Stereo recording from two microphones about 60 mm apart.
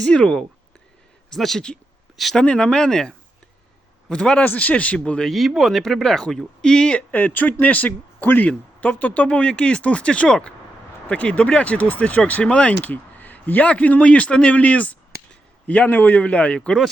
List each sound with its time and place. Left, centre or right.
0.0 s speech: centre
2.4 s speech: centre
5.3 s speech: centre
7.1 s speech: left